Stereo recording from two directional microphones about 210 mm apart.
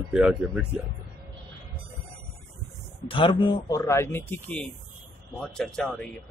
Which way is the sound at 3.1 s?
25° left (ahead or behind).